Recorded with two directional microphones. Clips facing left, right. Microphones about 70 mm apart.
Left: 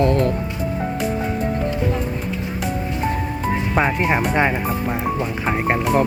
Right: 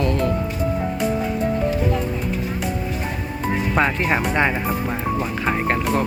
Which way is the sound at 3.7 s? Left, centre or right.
Centre.